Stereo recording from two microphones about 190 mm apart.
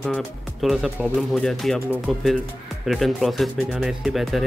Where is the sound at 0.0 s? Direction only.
Centre (ahead or behind).